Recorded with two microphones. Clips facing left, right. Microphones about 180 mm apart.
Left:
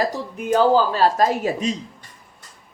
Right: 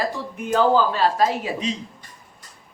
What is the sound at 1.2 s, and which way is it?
Speech, 45° left (ahead or behind).